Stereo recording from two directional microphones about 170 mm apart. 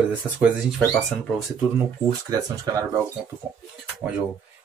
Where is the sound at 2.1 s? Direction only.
20° right (ahead or behind).